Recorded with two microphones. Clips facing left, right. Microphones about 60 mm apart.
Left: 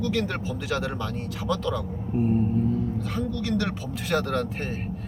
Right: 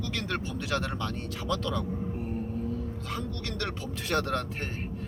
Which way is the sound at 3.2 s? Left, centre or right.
Centre.